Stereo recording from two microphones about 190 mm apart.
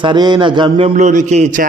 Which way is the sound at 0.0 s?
25° right (ahead or behind).